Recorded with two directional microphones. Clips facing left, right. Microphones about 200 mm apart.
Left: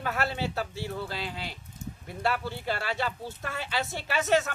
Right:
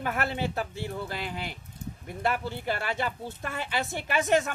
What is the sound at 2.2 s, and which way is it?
Speech, 15° right (ahead or behind).